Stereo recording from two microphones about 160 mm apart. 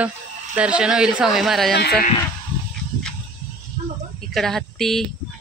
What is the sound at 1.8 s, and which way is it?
Speech, 85° left.